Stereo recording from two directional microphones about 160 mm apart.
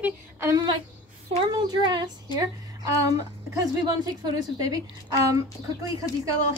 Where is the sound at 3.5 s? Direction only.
20° right (ahead or behind).